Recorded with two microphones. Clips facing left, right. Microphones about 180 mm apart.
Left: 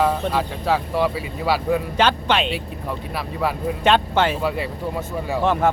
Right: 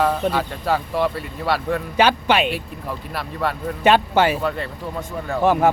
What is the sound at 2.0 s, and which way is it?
Speech, 10° right (ahead or behind).